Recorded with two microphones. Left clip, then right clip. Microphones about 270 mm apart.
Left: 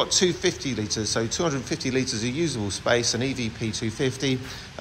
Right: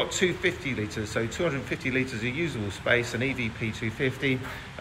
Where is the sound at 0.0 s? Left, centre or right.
Centre.